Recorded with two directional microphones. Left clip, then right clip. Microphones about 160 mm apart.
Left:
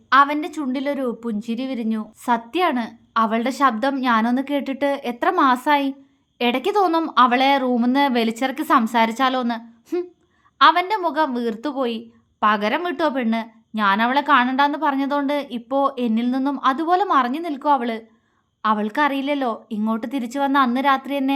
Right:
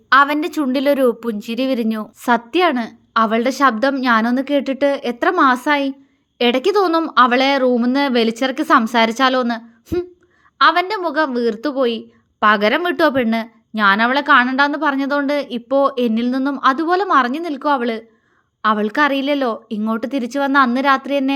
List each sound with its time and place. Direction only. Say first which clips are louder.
0.1 s a woman's voice: right 3 dB; 30° right (ahead or behind)